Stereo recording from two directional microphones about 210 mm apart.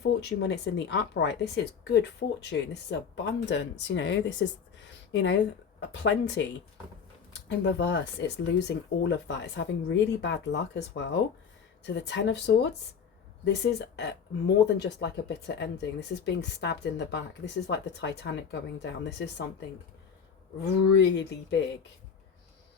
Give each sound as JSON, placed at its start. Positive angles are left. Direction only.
{"t": 0.0, "sound": "speech", "side_deg": 55}
{"t": 7.4, "sound": "speech", "side_deg": 55}
{"t": 9.0, "sound": "speech", "side_deg": 60}